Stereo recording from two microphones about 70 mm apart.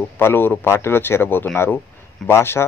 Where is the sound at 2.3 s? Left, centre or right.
Left.